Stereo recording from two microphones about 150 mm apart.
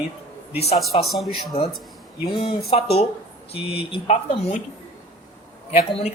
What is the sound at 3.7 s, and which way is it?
Speech, 40° left (ahead or behind).